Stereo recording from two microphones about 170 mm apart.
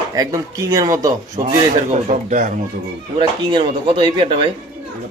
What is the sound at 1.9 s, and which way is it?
Speech, 50° right (ahead or behind).